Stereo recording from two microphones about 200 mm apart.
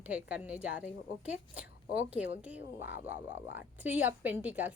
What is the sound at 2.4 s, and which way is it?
A woman's voice, 10° right (ahead or behind).